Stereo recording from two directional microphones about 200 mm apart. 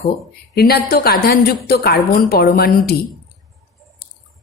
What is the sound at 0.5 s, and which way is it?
A woman's voice, 50° left (ahead or behind).